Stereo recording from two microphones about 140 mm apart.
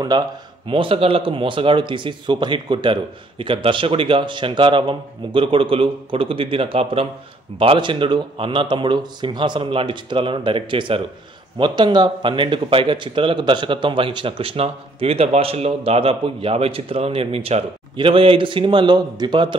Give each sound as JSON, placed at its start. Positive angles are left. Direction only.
{"t": 0.1, "sound": "speech", "side_deg": -30}